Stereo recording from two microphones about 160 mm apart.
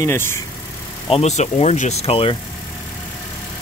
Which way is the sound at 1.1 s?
45° left (ahead or behind).